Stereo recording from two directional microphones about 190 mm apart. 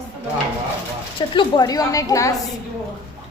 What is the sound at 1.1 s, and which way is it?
A woman's voice, 25° left (ahead or behind).